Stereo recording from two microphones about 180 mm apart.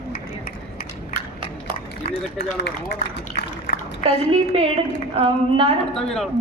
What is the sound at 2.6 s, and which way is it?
A man's voice, 65° left (ahead or behind).